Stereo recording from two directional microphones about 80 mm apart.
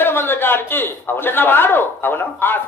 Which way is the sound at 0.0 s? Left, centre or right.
Left.